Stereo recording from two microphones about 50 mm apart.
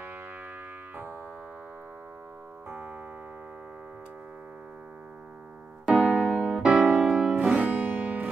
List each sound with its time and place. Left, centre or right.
0.9 s music: right
5.9 s music: right
7.4 s music: right